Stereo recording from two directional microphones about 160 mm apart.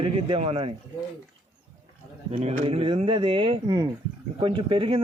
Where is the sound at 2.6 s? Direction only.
35° right (ahead or behind).